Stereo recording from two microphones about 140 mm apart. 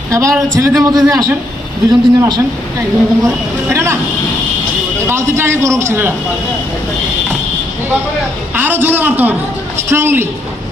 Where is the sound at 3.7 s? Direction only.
20° right (ahead or behind).